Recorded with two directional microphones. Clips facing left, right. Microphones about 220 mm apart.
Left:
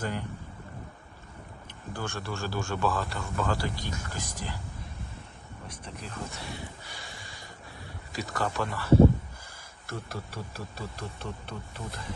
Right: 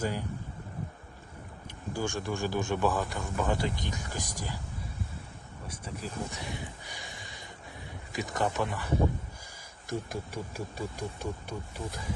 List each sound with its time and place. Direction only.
0.0 s speech: 10° right (ahead or behind)
1.9 s speech: 15° right (ahead or behind)